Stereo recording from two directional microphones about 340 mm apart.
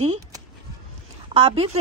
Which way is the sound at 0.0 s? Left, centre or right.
Centre.